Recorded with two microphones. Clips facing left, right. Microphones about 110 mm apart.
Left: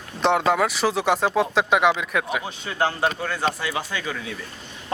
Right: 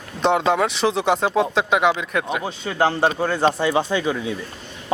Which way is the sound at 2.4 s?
30° right (ahead or behind).